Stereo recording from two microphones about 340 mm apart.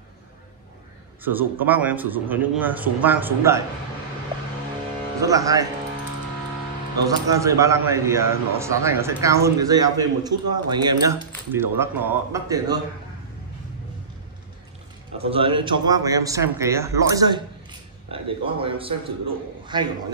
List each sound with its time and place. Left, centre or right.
1.2 s a man's voice: centre
5.2 s speech: centre
7.1 s speech: centre
15.2 s speech: centre